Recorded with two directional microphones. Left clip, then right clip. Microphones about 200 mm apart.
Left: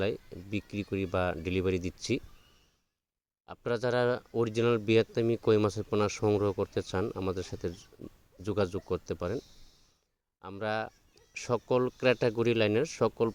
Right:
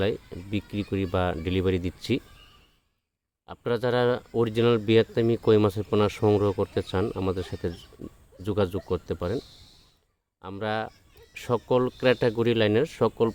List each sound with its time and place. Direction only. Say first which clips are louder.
0.0 s speech: right 5 dB; 35° left (ahead or behind)
3.4 s speech: right 5 dB; 35° left (ahead or behind)
10.4 s speech: right 4 dB; 35° left (ahead or behind)